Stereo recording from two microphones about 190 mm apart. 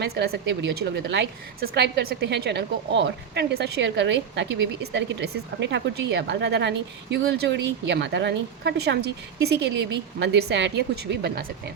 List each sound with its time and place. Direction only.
0.0 s a woman's voice: 60° right (ahead or behind)